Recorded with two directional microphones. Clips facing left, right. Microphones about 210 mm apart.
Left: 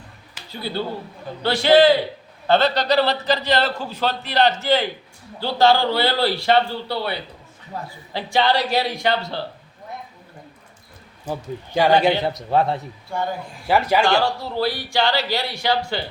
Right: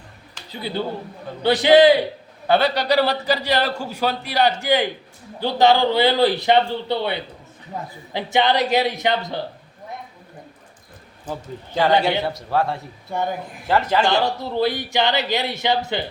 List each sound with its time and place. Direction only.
1.4 s a man's voice: 15° right (ahead or behind)
11.3 s a man's voice: 15° left (ahead or behind)
13.7 s a man's voice: 10° left (ahead or behind)
14.0 s speech: 20° right (ahead or behind)